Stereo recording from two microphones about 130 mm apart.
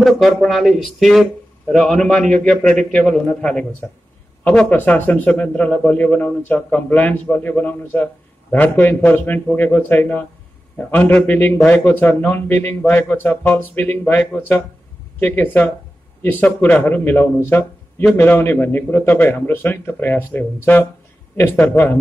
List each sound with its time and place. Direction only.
0.0 s speech: centre (ahead or behind)